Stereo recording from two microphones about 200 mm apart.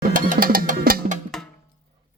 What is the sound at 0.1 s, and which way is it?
Music, 45° right (ahead or behind).